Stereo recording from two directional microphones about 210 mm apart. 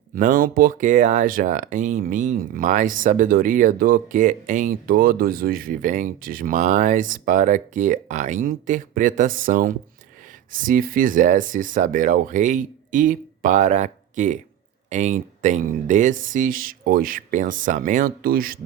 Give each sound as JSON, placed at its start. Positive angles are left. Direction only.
{"t": 0.2, "sound": "speech", "side_deg": -40}